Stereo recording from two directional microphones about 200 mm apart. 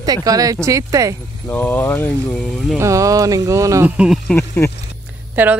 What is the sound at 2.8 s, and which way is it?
Speech, 15° right (ahead or behind).